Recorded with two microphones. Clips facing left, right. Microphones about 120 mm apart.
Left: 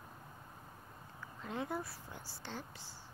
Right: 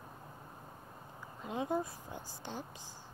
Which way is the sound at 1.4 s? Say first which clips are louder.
Right 5 dB; 20° right (ahead or behind).